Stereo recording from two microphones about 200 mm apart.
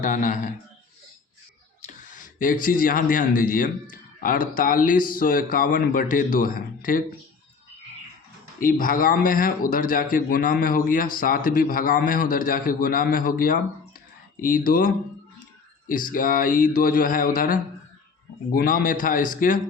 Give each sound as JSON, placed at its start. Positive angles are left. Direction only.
{"t": 0.0, "sound": "speech", "side_deg": 40}
{"t": 1.9, "sound": "speech", "side_deg": 40}
{"t": 8.5, "sound": "speech", "side_deg": 45}
{"t": 15.9, "sound": "speech", "side_deg": 45}